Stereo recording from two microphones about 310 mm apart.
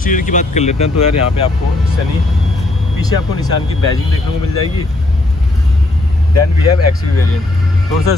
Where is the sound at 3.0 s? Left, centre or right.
Centre.